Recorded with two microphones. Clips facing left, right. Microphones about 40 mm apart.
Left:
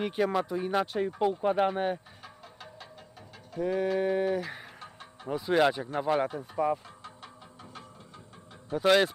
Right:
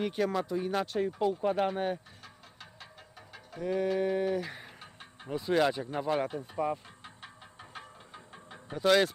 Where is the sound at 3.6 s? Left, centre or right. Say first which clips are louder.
Left 2 dB; centre.